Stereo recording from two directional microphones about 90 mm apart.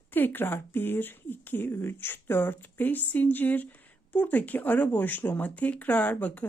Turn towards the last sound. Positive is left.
turn(degrees=15)  # may be behind; listen again after turning